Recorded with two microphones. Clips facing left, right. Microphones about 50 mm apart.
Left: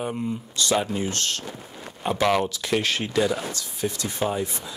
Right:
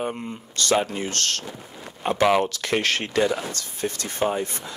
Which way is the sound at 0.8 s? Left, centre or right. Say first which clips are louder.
Even; right.